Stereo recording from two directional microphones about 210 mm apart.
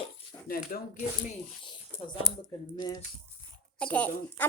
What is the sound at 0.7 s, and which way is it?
Speech, 45° left (ahead or behind).